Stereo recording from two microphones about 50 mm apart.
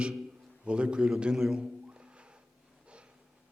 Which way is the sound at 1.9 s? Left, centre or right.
Right.